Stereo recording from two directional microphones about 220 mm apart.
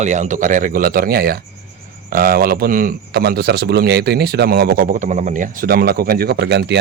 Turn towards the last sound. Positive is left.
turn(degrees=-50)  # may be behind; listen again after turning